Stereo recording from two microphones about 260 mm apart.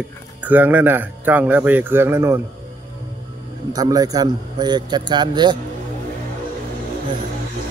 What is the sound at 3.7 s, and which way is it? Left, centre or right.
Speech, centre.